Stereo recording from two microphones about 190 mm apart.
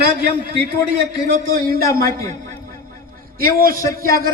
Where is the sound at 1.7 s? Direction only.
50° right (ahead or behind).